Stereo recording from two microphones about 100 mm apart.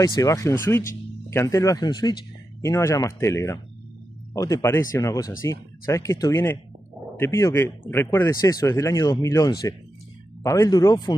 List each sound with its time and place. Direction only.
0.0 s speech: 35° left (ahead or behind)
2.6 s speech: 30° left (ahead or behind)
8.4 s speech: 40° left (ahead or behind)